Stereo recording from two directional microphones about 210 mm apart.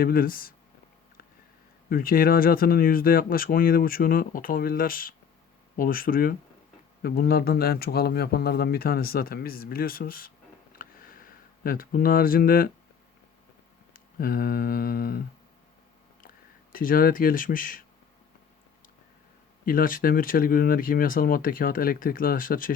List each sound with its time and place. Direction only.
0.0 s speech: 45° left (ahead or behind)
1.9 s speech: 45° left (ahead or behind)
13.9 s speech: 45° left (ahead or behind)
16.7 s speech: 40° left (ahead or behind)
19.6 s speech: 40° left (ahead or behind)